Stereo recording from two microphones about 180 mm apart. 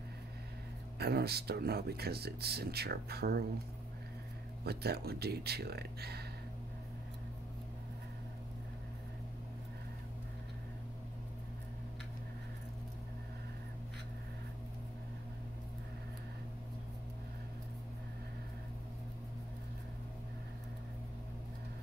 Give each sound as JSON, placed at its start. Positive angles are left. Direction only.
{"t": 0.9, "sound": "speech", "side_deg": -60}
{"t": 4.6, "sound": "speech", "side_deg": -60}